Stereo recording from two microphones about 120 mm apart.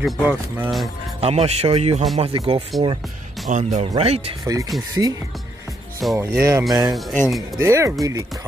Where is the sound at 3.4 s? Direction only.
90° right.